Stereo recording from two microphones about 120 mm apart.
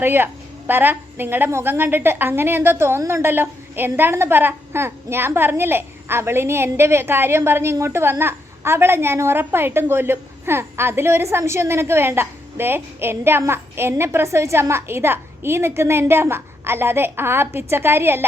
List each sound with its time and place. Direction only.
0.0 s a woman's voice: 20° right (ahead or behind)